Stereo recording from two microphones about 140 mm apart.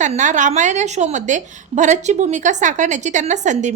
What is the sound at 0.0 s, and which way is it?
A woman's voice, 60° right (ahead or behind).